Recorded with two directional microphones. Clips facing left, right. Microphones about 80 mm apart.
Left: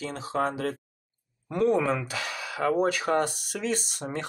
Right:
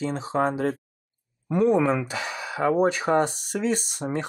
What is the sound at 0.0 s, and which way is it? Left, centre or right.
Speech, right.